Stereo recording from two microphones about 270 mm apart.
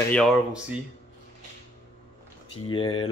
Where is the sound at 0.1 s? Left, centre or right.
Centre.